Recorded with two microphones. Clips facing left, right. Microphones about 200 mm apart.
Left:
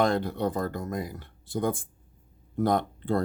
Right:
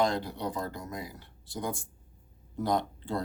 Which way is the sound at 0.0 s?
55° left (ahead or behind).